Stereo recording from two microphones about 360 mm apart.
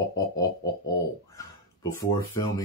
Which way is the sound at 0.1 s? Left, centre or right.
Centre.